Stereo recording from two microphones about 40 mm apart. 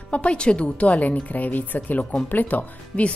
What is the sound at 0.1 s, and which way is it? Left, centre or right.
Speech, left.